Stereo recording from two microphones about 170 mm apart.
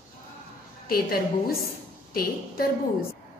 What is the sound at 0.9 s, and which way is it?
A woman's voice, 60° left (ahead or behind).